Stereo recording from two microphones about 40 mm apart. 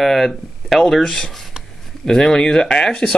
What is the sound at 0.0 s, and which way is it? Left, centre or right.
Speech, centre.